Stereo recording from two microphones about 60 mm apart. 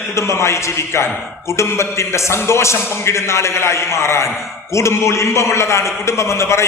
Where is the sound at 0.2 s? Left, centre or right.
Left.